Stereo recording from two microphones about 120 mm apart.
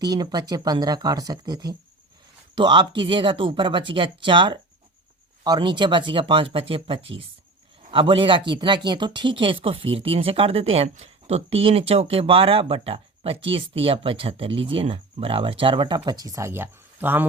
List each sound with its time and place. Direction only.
0.0 s speech: 35° right (ahead or behind)
16.0 s speech: 30° right (ahead or behind)